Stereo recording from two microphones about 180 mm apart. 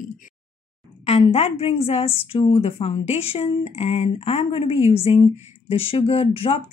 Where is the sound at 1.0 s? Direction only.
35° left (ahead or behind).